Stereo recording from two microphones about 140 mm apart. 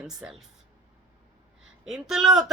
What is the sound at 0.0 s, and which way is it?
Speech, 5° right (ahead or behind).